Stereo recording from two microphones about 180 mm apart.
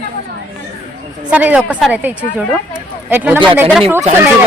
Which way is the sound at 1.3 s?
10° right (ahead or behind).